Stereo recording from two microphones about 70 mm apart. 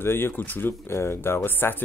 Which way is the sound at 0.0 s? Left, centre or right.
Left.